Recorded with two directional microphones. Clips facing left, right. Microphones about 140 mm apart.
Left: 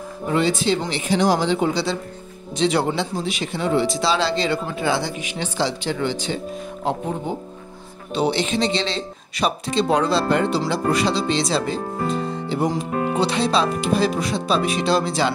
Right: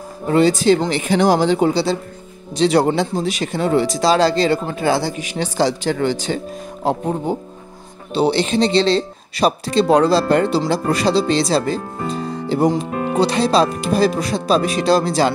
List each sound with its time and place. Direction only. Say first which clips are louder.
0.3 s speech: right 6 dB; 40° right (ahead or behind)
12.1 s music: right 6 dB; 35° right (ahead or behind)
13.2 s speech: right 6 dB; 40° right (ahead or behind)